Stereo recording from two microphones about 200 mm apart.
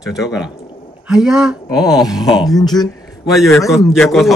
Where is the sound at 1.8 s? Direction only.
20° left (ahead or behind).